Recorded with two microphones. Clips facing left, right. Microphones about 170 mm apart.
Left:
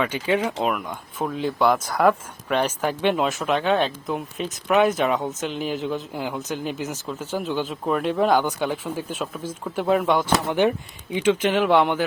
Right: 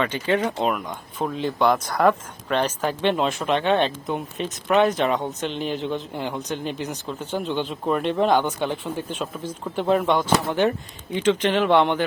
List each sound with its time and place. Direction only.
0.0 s speech: 10° left (ahead or behind)